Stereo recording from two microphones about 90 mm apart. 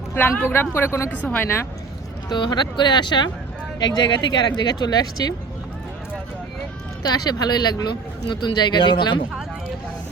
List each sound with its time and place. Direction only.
0.2 s speech: 25° left (ahead or behind)
2.3 s speech: 55° left (ahead or behind)
7.1 s speech: 50° left (ahead or behind)